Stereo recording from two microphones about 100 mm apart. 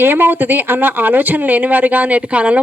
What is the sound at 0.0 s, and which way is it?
Speech, 20° right (ahead or behind).